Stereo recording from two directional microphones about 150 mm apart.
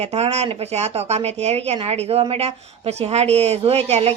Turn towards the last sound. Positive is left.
turn(degrees=-45)  # may be behind; listen again after turning